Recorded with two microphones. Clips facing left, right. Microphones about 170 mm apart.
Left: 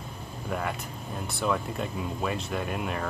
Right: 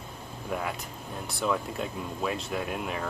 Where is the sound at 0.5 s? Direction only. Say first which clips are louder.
Left 1 dB; centre (ahead or behind).